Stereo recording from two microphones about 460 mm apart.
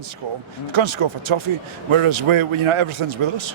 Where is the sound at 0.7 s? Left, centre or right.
Right.